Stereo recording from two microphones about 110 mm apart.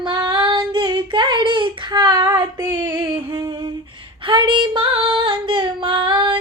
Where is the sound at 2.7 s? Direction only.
15° right (ahead or behind).